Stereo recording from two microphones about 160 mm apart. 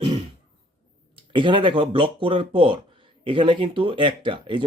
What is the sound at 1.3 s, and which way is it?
Speech, 30° right (ahead or behind).